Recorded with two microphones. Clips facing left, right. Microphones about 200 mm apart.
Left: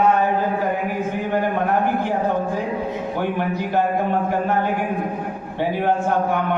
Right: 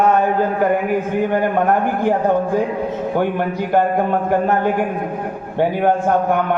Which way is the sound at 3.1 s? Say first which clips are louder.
Right 4 dB; 50° right (ahead or behind).